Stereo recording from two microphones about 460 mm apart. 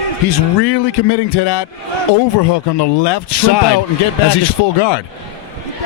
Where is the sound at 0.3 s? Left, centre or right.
Left.